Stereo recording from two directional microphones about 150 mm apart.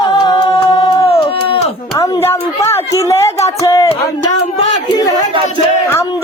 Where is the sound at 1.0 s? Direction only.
40° left (ahead or behind).